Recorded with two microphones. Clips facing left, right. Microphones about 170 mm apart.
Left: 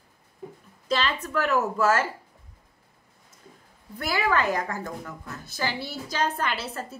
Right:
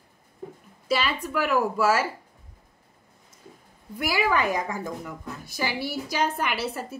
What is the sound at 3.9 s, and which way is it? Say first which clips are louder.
A woman's voice: right 1 dB; 10° right (ahead or behind).